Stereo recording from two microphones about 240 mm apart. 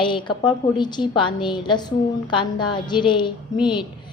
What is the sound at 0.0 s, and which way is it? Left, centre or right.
A woman's voice, centre.